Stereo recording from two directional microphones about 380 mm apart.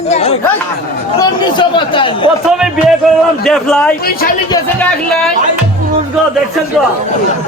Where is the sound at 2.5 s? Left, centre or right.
Centre.